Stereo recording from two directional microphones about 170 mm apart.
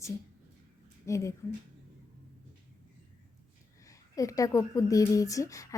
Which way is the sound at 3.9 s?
20° left (ahead or behind).